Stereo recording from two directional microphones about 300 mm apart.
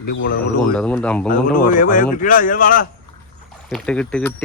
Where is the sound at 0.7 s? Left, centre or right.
Centre.